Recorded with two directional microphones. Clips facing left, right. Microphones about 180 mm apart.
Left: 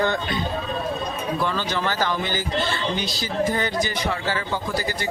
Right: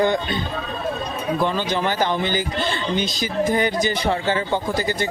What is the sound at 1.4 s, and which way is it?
Speech, 15° right (ahead or behind).